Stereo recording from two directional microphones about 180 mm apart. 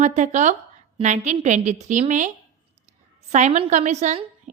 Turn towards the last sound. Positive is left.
turn(degrees=-40)  # may be behind; listen again after turning